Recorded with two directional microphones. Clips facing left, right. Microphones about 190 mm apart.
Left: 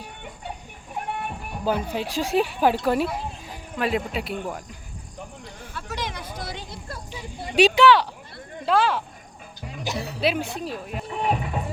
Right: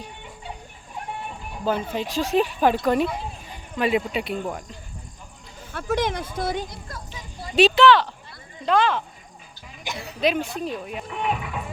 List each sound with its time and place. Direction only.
1.6 s speech: 10° left (ahead or behind)
5.7 s speech: 55° right (ahead or behind)
7.1 s speech: 10° left (ahead or behind)
9.7 s speech: 40° left (ahead or behind)
10.2 s speech: 5° left (ahead or behind)
11.1 s speech: 35° left (ahead or behind)